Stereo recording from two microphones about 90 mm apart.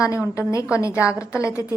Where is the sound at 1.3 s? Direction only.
35° left (ahead or behind).